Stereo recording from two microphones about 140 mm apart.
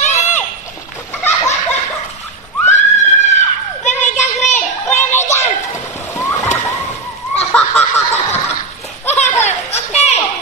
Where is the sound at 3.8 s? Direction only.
55° left (ahead or behind).